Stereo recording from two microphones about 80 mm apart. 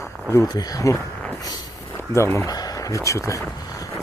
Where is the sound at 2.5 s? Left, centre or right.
Left.